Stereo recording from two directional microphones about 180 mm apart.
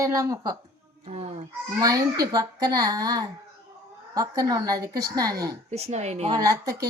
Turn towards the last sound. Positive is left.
turn(degrees=-20)  # may be behind; listen again after turning